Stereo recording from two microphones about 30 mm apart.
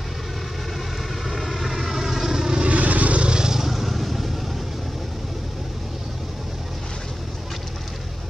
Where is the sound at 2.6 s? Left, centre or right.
Right.